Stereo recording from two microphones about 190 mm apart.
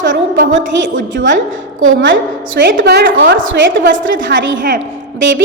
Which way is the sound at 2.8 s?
65° right (ahead or behind).